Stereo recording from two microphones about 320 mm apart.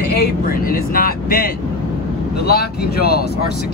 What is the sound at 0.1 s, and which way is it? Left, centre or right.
Speech, left.